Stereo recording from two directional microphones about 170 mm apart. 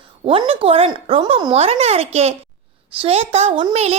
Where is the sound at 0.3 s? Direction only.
30° right (ahead or behind).